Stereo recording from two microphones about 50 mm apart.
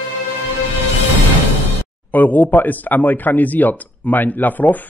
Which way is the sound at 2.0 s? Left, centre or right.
Left.